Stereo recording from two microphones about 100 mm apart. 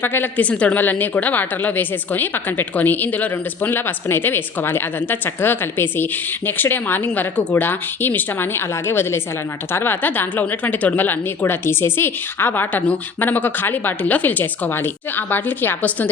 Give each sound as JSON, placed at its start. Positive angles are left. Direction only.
{"t": 0.0, "sound": "a woman's voice", "side_deg": 20}